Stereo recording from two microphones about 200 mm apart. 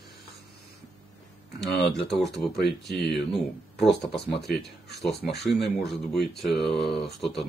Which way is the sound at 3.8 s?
55° left (ahead or behind).